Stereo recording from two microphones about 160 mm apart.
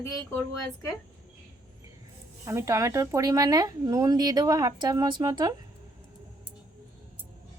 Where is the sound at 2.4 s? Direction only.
20° right (ahead or behind).